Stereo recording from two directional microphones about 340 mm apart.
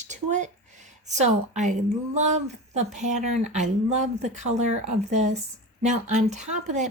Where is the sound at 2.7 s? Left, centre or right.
Right.